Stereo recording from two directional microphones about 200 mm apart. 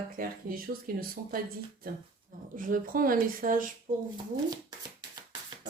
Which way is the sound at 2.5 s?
45° right (ahead or behind).